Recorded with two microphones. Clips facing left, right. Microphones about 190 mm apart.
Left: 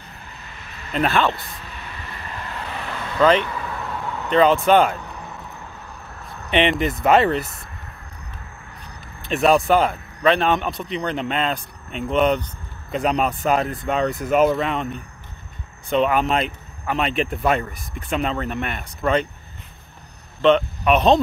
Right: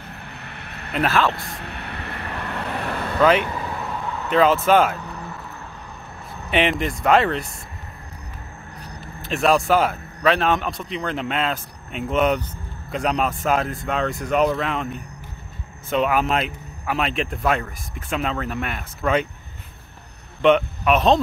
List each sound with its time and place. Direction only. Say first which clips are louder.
0.1 s vehicle: right 4 dB; 65° right (ahead or behind)
0.9 s speech: left 1 dB; centre (ahead or behind)
1.6 s vehicle: right 4 dB; 65° right (ahead or behind)
3.2 s speech: left 1 dB; 10° right (ahead or behind)
3.4 s vehicle: right 1 dB; 30° right (ahead or behind)
3.8 s vehicle: even; centre (ahead or behind)
6.5 s speech: left 2 dB; centre (ahead or behind)
9.2 s speech: left 2 dB; centre (ahead or behind)
15.9 s speech: left 1 dB; 5° right (ahead or behind)
20.4 s speech: even; 5° right (ahead or behind)